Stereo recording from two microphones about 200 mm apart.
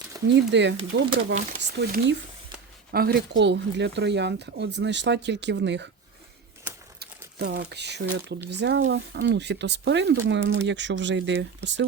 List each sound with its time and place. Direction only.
0.3 s speech: 60° right (ahead or behind)
7.3 s speech: 60° right (ahead or behind)